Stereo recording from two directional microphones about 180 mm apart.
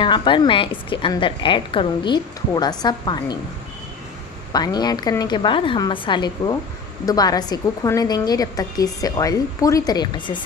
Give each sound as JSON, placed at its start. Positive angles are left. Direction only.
{"t": 0.0, "sound": "a woman's voice", "side_deg": 25}
{"t": 4.5, "sound": "a woman's voice", "side_deg": 20}